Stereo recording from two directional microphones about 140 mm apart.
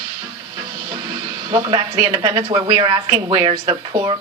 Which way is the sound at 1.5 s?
30° right (ahead or behind).